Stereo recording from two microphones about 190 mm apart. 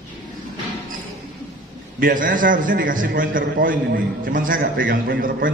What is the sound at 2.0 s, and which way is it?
A man's voice, 45° right (ahead or behind).